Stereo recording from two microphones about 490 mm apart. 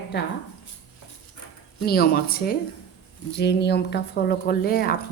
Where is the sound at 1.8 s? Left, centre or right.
Centre.